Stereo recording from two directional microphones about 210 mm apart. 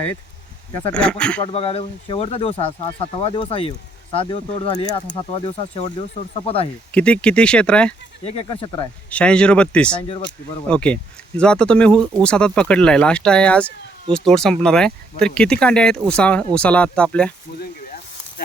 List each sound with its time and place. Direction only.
0.9 s speech: 5° left (ahead or behind)
1.4 s speech: 30° left (ahead or behind)
6.3 s speech: 25° left (ahead or behind)
6.9 s speech: 5° left (ahead or behind)
8.4 s speech: 20° left (ahead or behind)
9.0 s speech: 5° left (ahead or behind)
17.6 s a sound: 45° left (ahead or behind)